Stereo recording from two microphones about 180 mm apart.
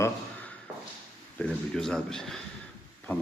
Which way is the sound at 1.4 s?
5° left (ahead or behind).